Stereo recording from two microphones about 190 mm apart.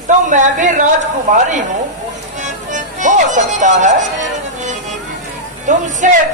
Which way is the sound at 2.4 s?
40° right (ahead or behind).